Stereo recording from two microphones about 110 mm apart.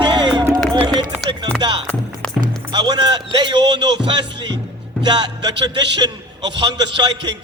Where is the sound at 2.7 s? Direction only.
40° right (ahead or behind).